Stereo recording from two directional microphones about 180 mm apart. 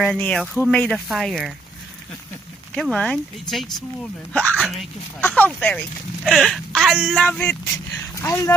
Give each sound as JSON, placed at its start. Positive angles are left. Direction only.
{"t": 0.2, "sound": "speech", "side_deg": 5}
{"t": 2.7, "sound": "speech", "side_deg": 5}
{"t": 7.3, "sound": "speech", "side_deg": 5}